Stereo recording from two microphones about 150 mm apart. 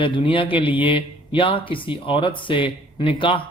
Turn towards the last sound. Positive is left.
turn(degrees=35)  # may be behind; listen again after turning